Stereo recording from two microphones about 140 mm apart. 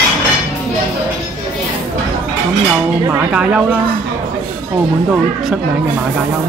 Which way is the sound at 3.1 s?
10° right (ahead or behind).